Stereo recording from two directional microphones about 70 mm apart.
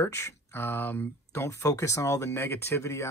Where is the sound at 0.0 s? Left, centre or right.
Left.